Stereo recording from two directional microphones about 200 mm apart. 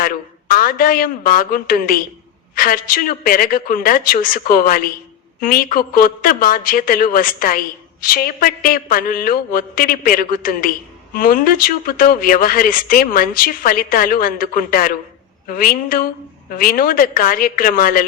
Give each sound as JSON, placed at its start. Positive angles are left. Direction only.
{"t": 0.0, "sound": "a man's voice", "side_deg": 45}